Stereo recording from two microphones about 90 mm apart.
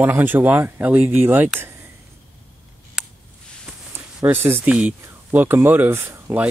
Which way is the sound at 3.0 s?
5° right (ahead or behind).